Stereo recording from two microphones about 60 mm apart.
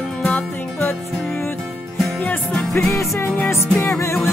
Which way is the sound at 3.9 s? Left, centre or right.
Left.